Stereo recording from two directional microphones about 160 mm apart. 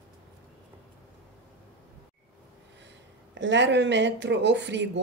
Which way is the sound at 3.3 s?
90° right.